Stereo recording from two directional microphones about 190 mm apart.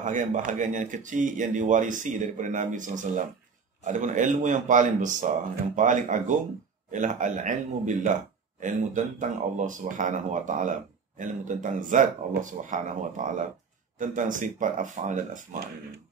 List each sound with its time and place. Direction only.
0.0 s a man's voice: 40° right (ahead or behind)